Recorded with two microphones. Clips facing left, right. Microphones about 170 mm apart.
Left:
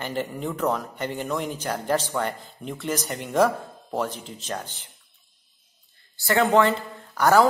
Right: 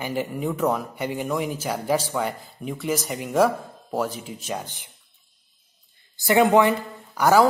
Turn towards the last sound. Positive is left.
turn(degrees=-10)  # may be behind; listen again after turning